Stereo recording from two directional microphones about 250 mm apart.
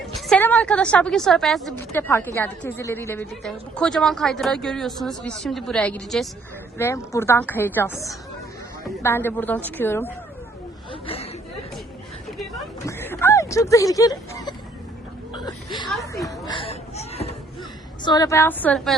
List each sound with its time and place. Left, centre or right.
0.3 s a woman's voice: centre
11.0 s chatter: left
12.8 s a sound: centre
15.3 s whimper: centre
16.5 s a sound: left
18.0 s a woman's voice: centre